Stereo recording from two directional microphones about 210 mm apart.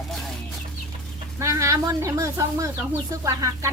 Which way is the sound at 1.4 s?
15° right (ahead or behind).